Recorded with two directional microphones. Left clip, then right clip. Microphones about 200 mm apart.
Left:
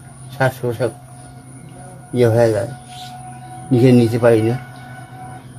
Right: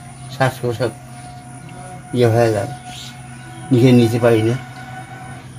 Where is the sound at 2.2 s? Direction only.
10° left (ahead or behind).